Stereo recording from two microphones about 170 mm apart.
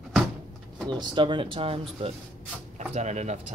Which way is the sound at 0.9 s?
30° right (ahead or behind).